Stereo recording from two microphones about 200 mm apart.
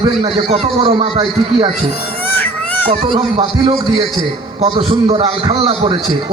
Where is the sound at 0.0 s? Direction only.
25° right (ahead or behind).